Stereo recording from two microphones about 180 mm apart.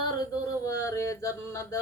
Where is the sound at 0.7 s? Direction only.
15° left (ahead or behind).